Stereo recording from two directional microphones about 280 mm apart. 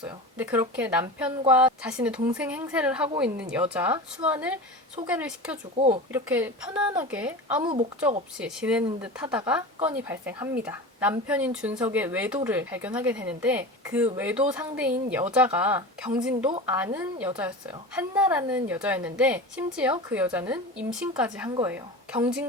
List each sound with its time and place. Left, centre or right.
0.0 s speech: centre
5.7 s speech: right
6.1 s speech: centre